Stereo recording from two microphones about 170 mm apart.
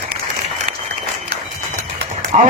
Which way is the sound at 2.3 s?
45° right (ahead or behind).